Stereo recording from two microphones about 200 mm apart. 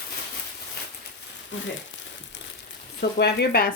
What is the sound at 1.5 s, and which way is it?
Speech, 70° left (ahead or behind).